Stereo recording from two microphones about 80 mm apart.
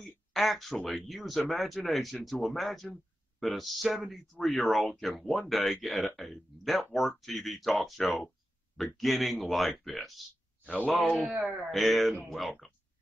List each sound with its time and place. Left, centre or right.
0.3 s speech: centre
10.6 s a sound: centre
10.9 s speech: centre